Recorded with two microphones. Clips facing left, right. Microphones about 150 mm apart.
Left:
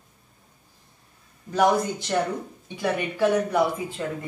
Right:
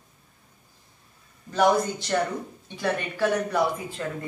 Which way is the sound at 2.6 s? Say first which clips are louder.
Left 2 dB; 15° left (ahead or behind).